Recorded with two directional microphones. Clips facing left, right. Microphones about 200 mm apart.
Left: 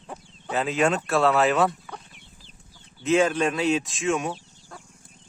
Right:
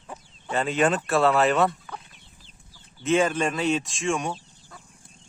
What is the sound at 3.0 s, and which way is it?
Speech, centre (ahead or behind).